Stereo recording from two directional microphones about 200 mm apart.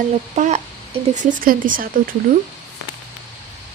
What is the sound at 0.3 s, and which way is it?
Speech, 35° right (ahead or behind).